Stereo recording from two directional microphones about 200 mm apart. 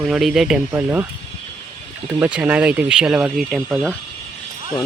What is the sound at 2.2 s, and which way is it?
Speech, 10° right (ahead or behind).